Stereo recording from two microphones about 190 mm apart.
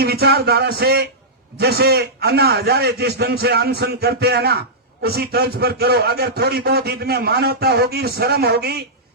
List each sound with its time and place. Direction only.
0.0 s a man's voice: 55° right (ahead or behind)